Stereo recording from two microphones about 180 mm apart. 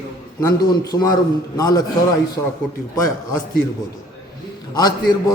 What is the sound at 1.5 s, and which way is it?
Speech, 20° left (ahead or behind).